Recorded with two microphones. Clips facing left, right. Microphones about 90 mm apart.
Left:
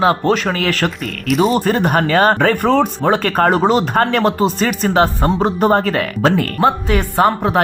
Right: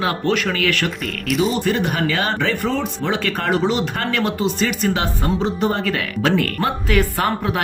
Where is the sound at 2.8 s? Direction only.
45° left (ahead or behind).